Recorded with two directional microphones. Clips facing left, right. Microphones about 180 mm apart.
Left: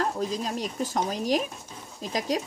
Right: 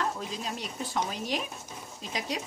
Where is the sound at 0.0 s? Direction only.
40° left (ahead or behind).